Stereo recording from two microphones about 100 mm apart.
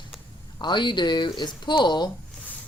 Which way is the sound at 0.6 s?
50° left (ahead or behind).